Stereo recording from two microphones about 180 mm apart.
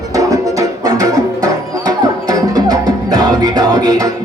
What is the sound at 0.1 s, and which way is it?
Music, 20° right (ahead or behind).